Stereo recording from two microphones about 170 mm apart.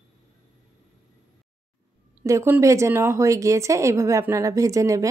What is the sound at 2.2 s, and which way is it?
A woman's voice, 15° right (ahead or behind).